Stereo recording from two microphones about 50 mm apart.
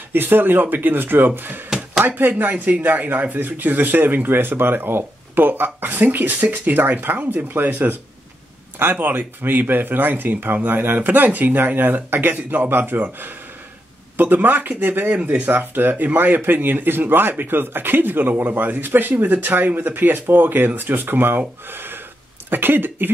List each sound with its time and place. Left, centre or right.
0.1 s speech: right
9.0 s speech: right
15.5 s speech: right